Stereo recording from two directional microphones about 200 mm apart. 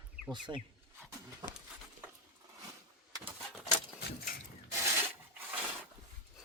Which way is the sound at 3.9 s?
50° left (ahead or behind).